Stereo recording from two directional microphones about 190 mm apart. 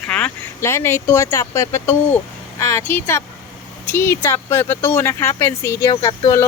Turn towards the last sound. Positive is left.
turn(degrees=20)  # may be behind; listen again after turning